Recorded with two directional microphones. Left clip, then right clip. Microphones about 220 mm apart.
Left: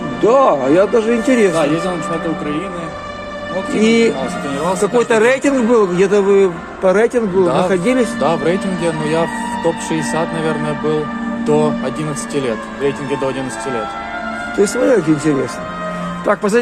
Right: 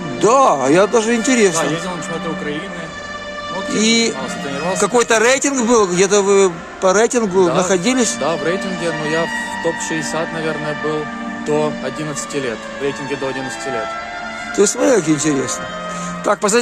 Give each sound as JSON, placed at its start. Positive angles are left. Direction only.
{"t": 0.2, "sound": "speech", "side_deg": -35}
{"t": 3.8, "sound": "speech", "side_deg": -30}
{"t": 7.4, "sound": "speech", "side_deg": -10}
{"t": 7.7, "sound": "speech", "side_deg": -30}
{"t": 8.2, "sound": "speech", "side_deg": -10}
{"t": 14.6, "sound": "speech", "side_deg": -30}